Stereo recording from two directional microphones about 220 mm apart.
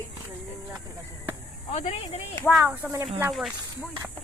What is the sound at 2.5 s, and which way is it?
Speech, 5° right (ahead or behind).